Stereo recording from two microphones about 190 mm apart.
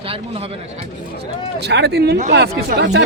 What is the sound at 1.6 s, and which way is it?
A man's voice, 60° right (ahead or behind).